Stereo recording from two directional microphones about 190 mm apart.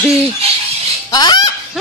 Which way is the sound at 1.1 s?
20° left (ahead or behind).